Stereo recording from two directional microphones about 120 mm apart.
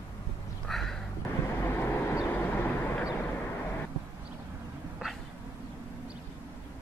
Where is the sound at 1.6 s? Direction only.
20° left (ahead or behind).